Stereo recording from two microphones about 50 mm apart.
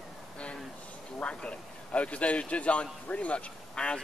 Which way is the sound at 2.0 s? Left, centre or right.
Left.